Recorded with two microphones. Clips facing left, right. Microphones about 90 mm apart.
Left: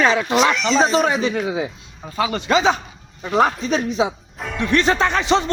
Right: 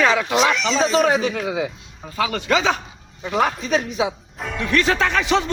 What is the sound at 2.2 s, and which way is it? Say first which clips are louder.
Speech: left 2 dB; 25° left (ahead or behind).